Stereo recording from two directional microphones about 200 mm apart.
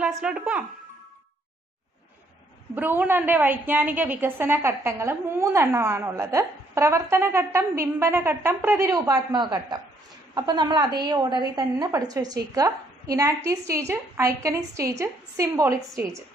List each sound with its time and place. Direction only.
0.0 s speech: 5° right (ahead or behind)
2.7 s a woman's voice: 10° right (ahead or behind)